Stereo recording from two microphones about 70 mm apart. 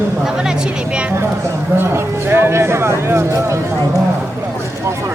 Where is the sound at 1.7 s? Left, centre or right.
Right.